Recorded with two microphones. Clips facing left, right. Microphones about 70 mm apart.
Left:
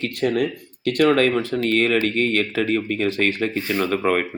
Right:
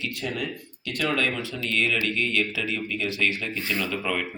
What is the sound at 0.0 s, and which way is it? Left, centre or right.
A man's voice, left.